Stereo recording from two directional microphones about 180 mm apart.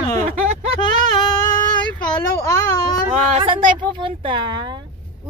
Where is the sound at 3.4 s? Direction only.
25° right (ahead or behind).